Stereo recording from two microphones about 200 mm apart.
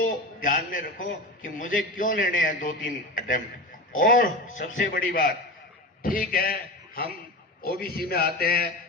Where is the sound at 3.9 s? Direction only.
45° left (ahead or behind).